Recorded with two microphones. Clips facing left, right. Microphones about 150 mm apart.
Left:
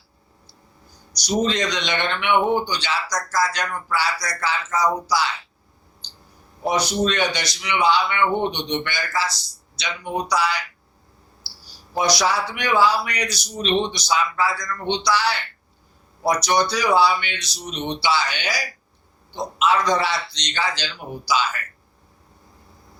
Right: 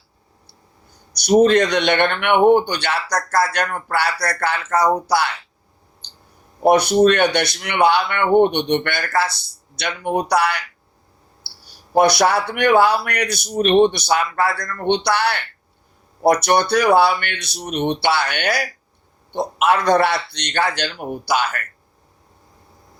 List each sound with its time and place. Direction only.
1.1 s speech: 60° right (ahead or behind)
6.0 s clicking: 60° right (ahead or behind)
6.6 s speech: 60° right (ahead or behind)